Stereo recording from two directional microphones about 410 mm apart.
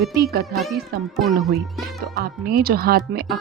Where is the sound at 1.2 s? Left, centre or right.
Centre.